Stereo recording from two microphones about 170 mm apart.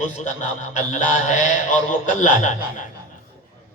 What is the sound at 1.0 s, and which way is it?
Speech, 45° left (ahead or behind).